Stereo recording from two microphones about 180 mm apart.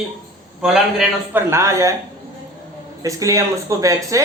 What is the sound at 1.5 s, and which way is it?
Speech, 15° right (ahead or behind).